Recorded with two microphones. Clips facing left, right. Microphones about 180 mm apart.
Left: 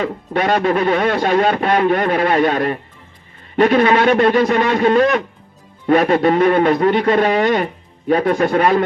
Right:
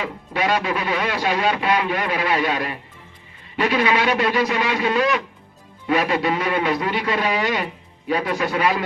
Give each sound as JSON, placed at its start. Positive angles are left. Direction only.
{"t": 0.0, "sound": "a man's voice", "side_deg": 50}